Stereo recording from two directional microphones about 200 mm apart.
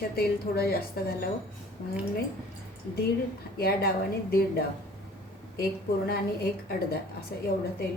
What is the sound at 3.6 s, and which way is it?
A woman's voice, 50° left (ahead or behind).